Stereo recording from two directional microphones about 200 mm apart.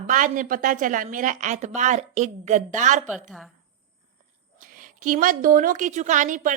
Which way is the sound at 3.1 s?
Centre (ahead or behind).